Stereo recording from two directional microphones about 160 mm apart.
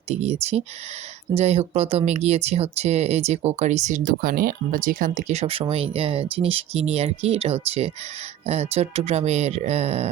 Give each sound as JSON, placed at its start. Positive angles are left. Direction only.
{"t": 0.1, "sound": "speech", "side_deg": -40}
{"t": 1.4, "sound": "speech", "side_deg": -40}